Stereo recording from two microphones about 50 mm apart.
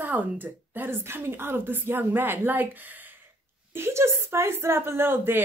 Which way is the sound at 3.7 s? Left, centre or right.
Right.